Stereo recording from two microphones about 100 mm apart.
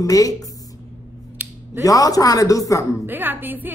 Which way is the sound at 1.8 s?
35° left (ahead or behind).